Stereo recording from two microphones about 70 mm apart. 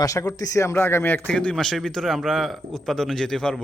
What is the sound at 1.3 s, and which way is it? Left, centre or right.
A man's voice, centre.